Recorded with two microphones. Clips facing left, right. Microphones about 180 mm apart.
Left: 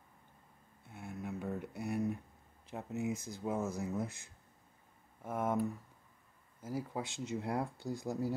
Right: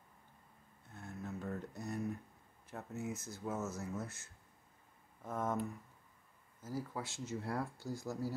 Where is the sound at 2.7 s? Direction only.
15° left (ahead or behind).